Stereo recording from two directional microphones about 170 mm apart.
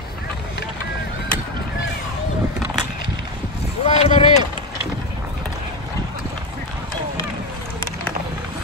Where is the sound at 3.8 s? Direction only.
40° left (ahead or behind).